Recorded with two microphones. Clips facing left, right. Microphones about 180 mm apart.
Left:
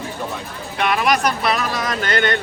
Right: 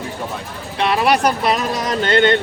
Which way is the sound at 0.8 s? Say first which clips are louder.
Right 2 dB; 30° right (ahead or behind).